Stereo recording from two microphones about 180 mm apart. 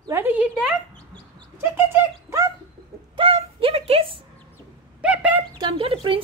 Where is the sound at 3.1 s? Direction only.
30° right (ahead or behind).